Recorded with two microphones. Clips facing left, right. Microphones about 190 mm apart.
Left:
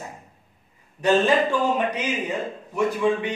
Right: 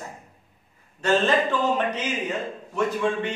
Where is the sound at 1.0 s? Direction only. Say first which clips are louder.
Left 2 dB; 10° left (ahead or behind).